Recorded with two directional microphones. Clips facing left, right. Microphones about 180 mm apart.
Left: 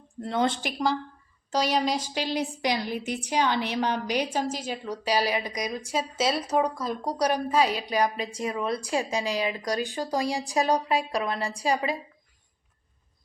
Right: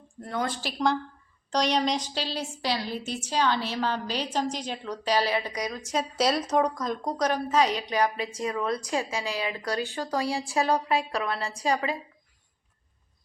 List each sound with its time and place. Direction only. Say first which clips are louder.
0.2 s speech: left 4 dB; 25° left (ahead or behind)
1.5 s a woman's voice: even; 5° left (ahead or behind)